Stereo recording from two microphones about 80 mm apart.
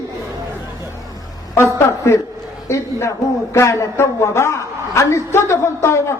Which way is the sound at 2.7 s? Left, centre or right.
Left.